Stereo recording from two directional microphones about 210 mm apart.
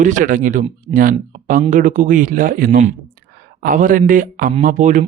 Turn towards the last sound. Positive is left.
turn(degrees=-35)  # may be behind; listen again after turning